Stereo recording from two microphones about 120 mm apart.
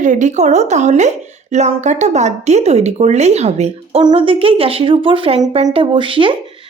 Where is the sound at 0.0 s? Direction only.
90° right; by 4.0 s 65° right (ahead or behind).